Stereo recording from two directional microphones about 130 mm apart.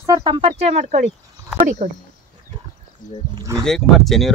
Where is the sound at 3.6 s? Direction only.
Centre (ahead or behind).